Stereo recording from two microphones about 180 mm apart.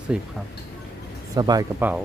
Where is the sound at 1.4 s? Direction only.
20° right (ahead or behind).